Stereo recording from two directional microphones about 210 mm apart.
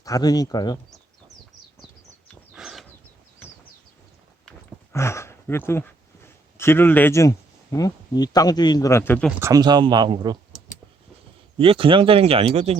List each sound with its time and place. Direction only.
0.0 s speech: 15° left (ahead or behind)
2.2 s a sound: centre (ahead or behind)
4.4 s speech: 10° left (ahead or behind)
9.4 s speech: 15° right (ahead or behind)
11.5 s speech: 25° right (ahead or behind)